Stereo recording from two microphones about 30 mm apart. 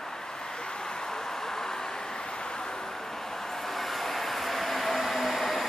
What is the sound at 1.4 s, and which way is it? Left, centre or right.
Vehicle, centre.